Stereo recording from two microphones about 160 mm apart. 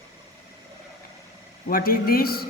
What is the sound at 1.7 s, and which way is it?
Speech, 65° left (ahead or behind).